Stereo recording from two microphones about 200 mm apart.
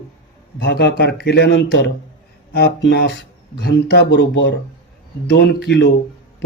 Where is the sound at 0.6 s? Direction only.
60° left (ahead or behind).